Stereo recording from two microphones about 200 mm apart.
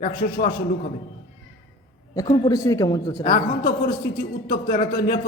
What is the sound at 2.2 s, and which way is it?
A woman's voice, 20° left (ahead or behind).